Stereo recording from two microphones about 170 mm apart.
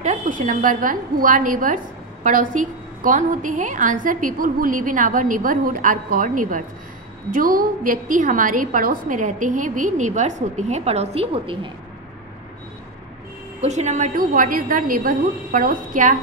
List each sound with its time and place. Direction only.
0.0 s a woman's voice: 45° right (ahead or behind)
13.6 s a woman's voice: 40° right (ahead or behind)